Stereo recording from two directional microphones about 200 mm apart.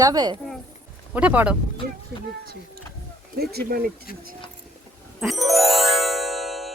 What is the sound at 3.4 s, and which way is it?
Speech, 50° right (ahead or behind).